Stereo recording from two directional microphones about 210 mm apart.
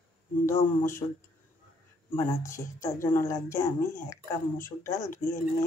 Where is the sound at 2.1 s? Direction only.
15° left (ahead or behind).